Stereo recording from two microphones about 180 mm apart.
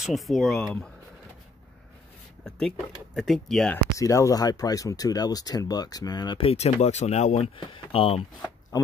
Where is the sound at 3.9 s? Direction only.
15° left (ahead or behind).